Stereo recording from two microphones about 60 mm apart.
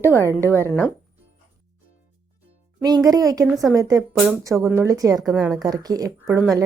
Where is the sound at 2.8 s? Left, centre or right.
Right.